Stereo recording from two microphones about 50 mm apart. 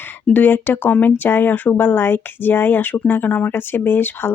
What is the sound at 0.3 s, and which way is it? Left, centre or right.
Speech, left.